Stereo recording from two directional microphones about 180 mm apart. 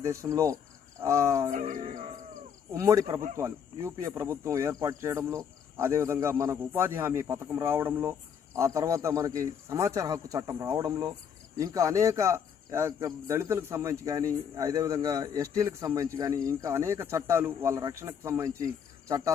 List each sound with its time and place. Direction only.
0.0 s speech: 15° right (ahead or behind)
1.5 s music: 45° right (ahead or behind)
2.7 s speech: 15° right (ahead or behind)